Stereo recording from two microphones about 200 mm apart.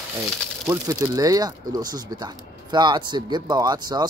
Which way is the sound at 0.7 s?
15° right (ahead or behind).